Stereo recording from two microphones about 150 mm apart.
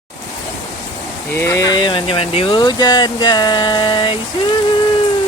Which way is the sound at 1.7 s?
30° left (ahead or behind).